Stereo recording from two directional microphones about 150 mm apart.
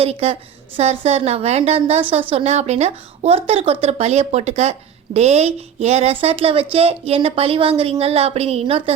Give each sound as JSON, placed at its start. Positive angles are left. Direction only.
{"t": 0.0, "sound": "speech", "side_deg": -45}